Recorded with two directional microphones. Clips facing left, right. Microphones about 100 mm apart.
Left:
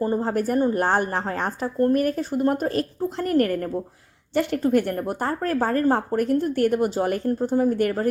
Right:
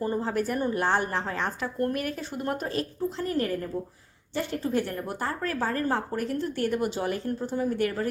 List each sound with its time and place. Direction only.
0.0 s a woman's voice: 40° left (ahead or behind)